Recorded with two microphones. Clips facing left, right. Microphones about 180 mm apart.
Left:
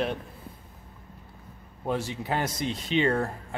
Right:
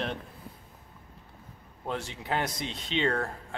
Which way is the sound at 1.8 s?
5° left (ahead or behind).